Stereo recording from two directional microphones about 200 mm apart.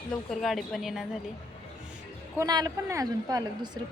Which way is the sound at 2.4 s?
20° right (ahead or behind).